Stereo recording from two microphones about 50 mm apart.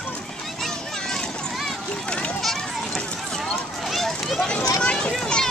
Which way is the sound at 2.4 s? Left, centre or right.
Centre.